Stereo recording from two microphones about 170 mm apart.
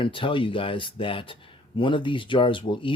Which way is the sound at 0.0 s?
30° left (ahead or behind).